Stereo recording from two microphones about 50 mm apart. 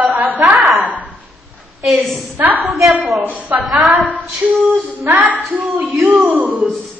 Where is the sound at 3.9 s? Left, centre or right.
Right.